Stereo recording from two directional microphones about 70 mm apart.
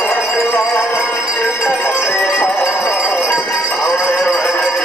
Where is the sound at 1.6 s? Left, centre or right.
Left.